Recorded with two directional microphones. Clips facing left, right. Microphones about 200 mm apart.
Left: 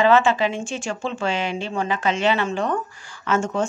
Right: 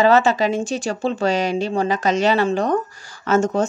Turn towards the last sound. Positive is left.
turn(degrees=-40)  # may be behind; listen again after turning